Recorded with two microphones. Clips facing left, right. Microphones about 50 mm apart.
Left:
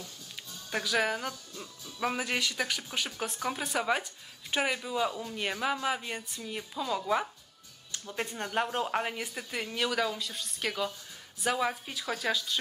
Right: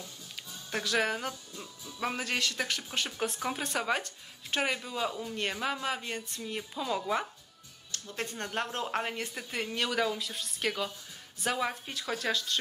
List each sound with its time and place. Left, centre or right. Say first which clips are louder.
0.7 s speech: left 1 dB; centre
7.9 s speech: left 2 dB; centre